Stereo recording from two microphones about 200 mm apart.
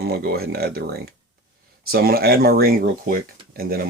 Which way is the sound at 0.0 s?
50° right (ahead or behind).